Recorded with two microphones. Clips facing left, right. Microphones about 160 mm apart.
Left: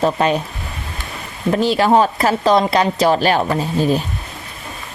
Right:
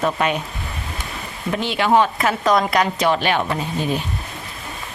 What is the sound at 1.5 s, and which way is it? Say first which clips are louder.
Speech: left 5 dB; 40° left (ahead or behind).